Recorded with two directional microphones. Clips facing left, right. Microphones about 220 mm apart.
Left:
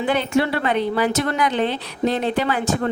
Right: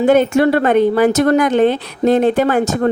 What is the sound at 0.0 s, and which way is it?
Speech, 45° right (ahead or behind).